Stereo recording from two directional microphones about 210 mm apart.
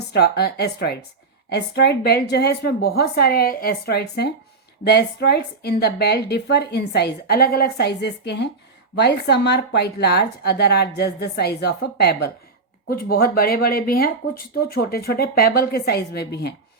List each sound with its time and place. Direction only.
0.1 s a woman's voice: 50° left (ahead or behind)